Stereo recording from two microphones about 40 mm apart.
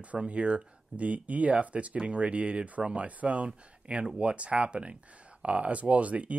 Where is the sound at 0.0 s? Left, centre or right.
Right.